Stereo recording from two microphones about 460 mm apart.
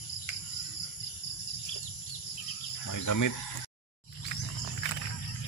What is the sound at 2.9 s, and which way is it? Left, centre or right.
Speech, left.